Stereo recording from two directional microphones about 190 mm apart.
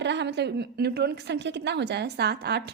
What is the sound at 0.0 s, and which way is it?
A woman's voice, 65° right (ahead or behind).